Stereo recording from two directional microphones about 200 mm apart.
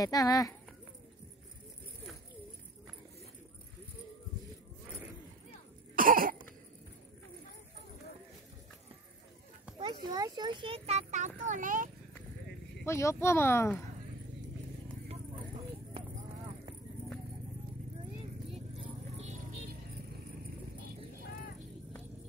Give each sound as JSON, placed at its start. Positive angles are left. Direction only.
{"t": 0.0, "sound": "speech", "side_deg": 20}
{"t": 4.8, "sound": "a sound", "side_deg": -5}
{"t": 5.9, "sound": "cough", "side_deg": -45}
{"t": 9.8, "sound": "a child's voice", "side_deg": -25}
{"t": 12.8, "sound": "speech", "side_deg": 15}